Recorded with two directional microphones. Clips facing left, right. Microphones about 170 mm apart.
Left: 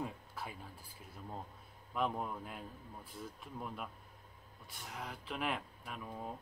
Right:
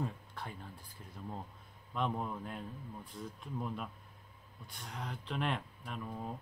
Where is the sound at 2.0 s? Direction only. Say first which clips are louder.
Right 1 dB; centre (ahead or behind).